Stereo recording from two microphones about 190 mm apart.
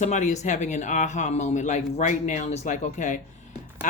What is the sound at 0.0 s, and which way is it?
Speech, 40° left (ahead or behind).